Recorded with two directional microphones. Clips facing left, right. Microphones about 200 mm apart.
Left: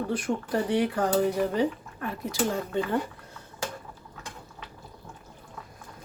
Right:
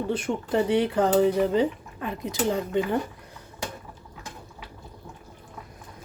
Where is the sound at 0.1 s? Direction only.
25° right (ahead or behind).